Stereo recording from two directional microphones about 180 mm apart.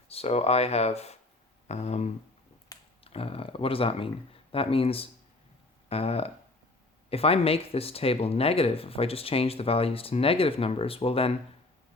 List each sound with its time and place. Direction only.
0.1 s speech: 35° left (ahead or behind)